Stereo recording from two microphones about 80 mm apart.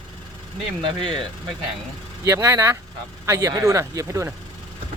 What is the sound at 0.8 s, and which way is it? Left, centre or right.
Speech, right.